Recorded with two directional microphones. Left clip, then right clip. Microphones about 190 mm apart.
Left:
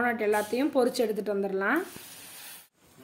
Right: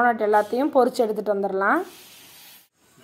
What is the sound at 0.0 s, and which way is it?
Speech, centre (ahead or behind).